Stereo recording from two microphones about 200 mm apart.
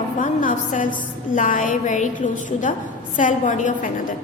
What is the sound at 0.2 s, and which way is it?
A woman's voice, 40° left (ahead or behind).